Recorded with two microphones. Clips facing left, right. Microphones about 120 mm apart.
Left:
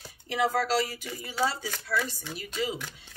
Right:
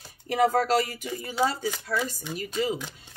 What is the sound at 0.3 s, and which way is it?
Speech, 45° right (ahead or behind).